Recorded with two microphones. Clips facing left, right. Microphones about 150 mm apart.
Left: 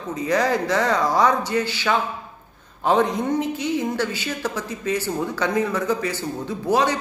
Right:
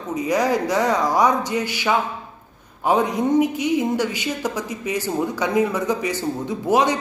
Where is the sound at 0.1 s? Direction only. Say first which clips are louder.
Right 1 dB; 15° right (ahead or behind).